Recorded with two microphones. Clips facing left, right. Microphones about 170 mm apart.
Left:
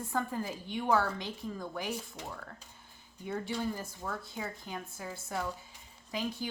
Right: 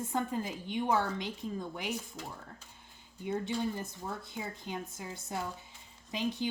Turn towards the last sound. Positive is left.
turn(degrees=-20)  # may be behind; listen again after turning